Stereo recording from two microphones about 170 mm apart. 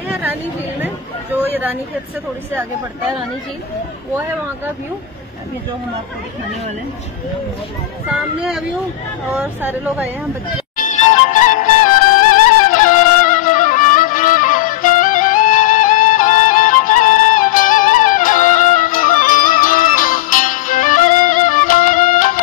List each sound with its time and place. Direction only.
0.2 s speech: 10° right (ahead or behind)
9.3 s speech: 10° right (ahead or behind)
11.4 s music: 50° left (ahead or behind)